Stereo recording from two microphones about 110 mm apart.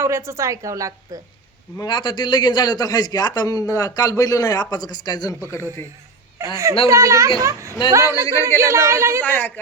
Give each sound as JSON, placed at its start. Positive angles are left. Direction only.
{"t": 0.0, "sound": "a woman's voice", "side_deg": -25}
{"t": 1.8, "sound": "a man's voice", "side_deg": 40}
{"t": 6.4, "sound": "a woman's voice", "side_deg": -25}
{"t": 9.2, "sound": "speech", "side_deg": 15}